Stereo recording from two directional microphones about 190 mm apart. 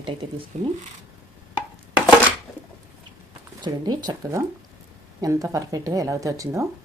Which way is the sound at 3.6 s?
20° right (ahead or behind).